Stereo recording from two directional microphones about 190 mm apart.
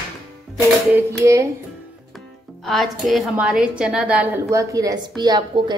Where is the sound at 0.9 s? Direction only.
15° right (ahead or behind).